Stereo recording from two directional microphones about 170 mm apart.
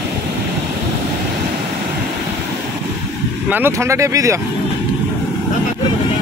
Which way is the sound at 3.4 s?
10° right (ahead or behind).